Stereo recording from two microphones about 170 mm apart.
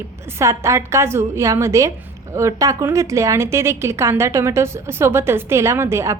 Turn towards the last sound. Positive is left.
turn(degrees=-15)  # may be behind; listen again after turning